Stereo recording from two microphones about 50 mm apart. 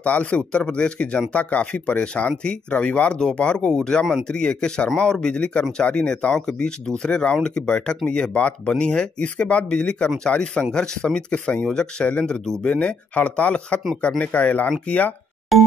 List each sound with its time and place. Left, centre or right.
0.0 s speech: left